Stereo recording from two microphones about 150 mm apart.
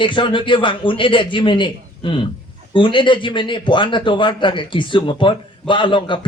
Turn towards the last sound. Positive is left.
turn(degrees=30)  # may be behind; listen again after turning